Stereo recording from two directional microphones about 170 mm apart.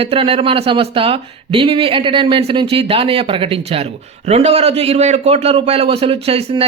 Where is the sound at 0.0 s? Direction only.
35° right (ahead or behind).